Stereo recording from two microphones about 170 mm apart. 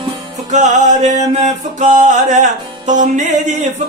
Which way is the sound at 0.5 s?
45° right (ahead or behind).